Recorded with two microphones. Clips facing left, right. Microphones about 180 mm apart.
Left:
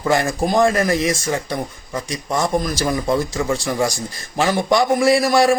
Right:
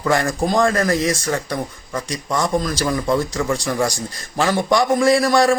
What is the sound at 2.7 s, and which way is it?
Speech, 15° left (ahead or behind).